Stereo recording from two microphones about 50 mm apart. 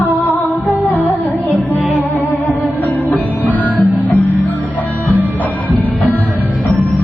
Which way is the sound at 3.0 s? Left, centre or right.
Left.